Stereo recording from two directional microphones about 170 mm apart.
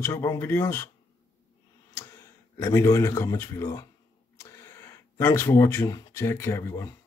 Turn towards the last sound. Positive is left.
turn(degrees=15)  # may be behind; listen again after turning